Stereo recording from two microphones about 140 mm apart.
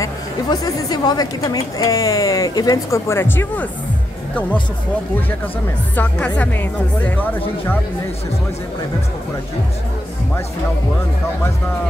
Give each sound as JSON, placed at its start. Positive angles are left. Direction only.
{"t": 0.0, "sound": "a woman's voice", "side_deg": 30}
{"t": 5.9, "sound": "speech", "side_deg": 10}